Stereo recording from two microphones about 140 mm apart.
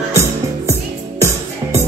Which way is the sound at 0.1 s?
20° right (ahead or behind).